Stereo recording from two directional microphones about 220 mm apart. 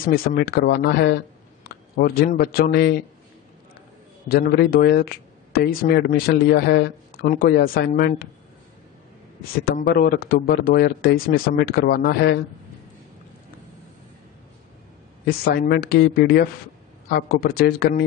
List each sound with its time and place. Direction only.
0.0 s speech: 40° left (ahead or behind)
4.3 s speech: 40° left (ahead or behind)
9.7 s speech: 40° left (ahead or behind)
15.2 s speech: 45° left (ahead or behind)
17.1 s speech: 45° left (ahead or behind)